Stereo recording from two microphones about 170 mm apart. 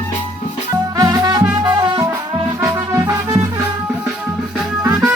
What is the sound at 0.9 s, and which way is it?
Music, 20° right (ahead or behind).